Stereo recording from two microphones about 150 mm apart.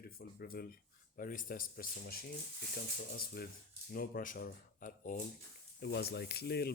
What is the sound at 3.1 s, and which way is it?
Speech, 90° left.